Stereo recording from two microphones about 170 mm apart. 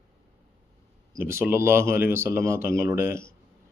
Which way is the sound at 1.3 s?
15° right (ahead or behind).